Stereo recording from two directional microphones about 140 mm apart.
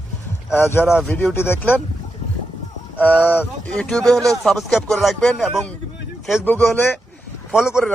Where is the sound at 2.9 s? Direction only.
10° left (ahead or behind).